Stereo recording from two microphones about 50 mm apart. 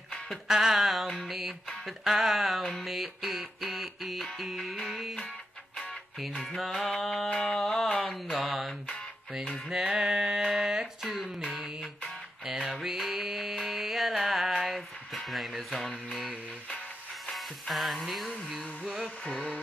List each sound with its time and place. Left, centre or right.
0.5 s music: centre
9.7 s a sound: centre
12.4 s music: centre
15.1 s speech: centre
17.3 s music: centre
19.0 s music: left